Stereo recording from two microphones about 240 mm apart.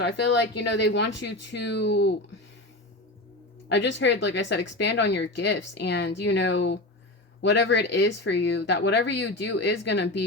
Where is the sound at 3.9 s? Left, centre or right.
Left.